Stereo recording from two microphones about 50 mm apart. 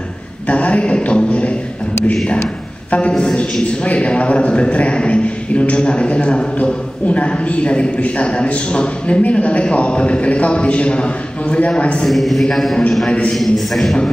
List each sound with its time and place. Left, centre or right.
0.5 s a sound: left
2.9 s a man's voice: left
12.0 s a man's voice: centre